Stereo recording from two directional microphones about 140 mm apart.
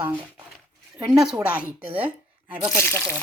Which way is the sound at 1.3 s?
10° right (ahead or behind).